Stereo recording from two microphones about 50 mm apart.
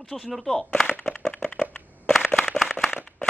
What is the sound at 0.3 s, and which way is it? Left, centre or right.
Speech, centre.